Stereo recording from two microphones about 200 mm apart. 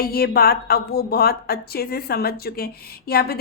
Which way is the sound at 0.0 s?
50° left (ahead or behind).